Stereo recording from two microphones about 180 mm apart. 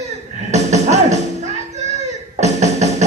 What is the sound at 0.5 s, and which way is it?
Music, 40° right (ahead or behind).